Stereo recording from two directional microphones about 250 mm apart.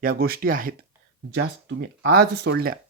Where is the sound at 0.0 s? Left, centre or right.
Right.